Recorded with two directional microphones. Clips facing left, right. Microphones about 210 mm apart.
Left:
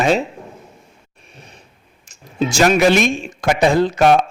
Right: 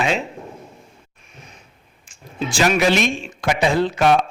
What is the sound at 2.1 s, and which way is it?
Speech, 45° left (ahead or behind).